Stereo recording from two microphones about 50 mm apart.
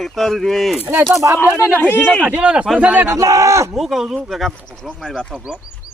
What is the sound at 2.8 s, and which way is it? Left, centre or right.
Speech, right.